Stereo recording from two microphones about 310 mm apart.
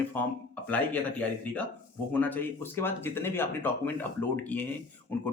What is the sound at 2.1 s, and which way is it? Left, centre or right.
Speech, centre.